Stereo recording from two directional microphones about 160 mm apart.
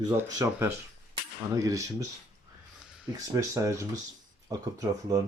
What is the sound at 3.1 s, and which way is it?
Speech, 20° right (ahead or behind).